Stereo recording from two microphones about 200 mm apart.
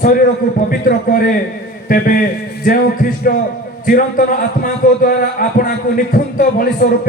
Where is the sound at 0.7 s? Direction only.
45° left (ahead or behind).